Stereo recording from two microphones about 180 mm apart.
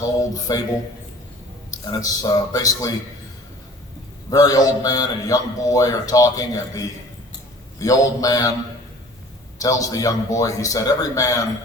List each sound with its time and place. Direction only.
0.3 s a man's voice: 20° left (ahead or behind)
1.7 s a man's voice: 20° left (ahead or behind)
4.3 s a man's voice: 20° left (ahead or behind)
9.6 s a man's voice: 20° left (ahead or behind)